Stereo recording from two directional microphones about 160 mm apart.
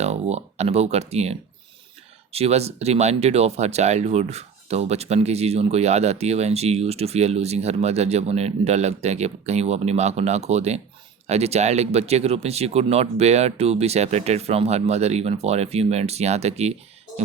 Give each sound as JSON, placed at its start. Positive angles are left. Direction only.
{"t": 0.0, "sound": "speech", "side_deg": -40}